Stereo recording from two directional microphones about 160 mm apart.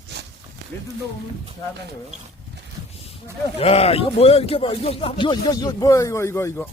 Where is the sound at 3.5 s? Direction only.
40° left (ahead or behind).